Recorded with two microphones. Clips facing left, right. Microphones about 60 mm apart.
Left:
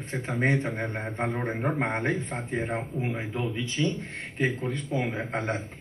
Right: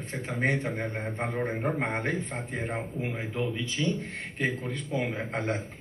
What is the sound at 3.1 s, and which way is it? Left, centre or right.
Speech, left.